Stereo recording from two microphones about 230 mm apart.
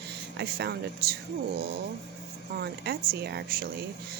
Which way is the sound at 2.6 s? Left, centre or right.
Right.